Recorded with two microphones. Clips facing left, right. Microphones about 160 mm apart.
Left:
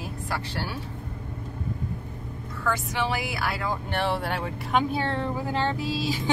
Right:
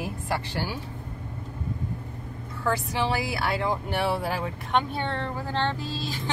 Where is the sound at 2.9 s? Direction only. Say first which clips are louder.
Right 1 dB; 30° right (ahead or behind).